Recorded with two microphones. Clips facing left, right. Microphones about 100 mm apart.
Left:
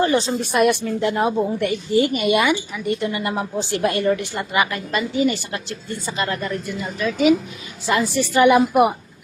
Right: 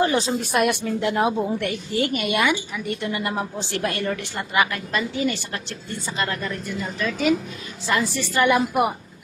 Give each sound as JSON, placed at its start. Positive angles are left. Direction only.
{"t": 0.0, "sound": "a woman's voice", "side_deg": -5}
{"t": 3.8, "sound": "a woman's voice", "side_deg": 15}